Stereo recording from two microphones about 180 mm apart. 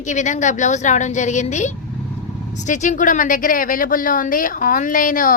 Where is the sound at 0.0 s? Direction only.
45° left (ahead or behind).